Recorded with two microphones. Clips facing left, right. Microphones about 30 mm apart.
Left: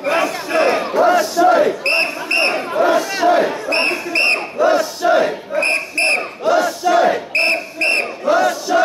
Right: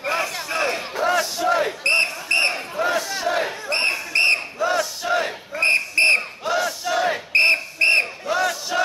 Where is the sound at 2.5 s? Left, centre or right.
Left.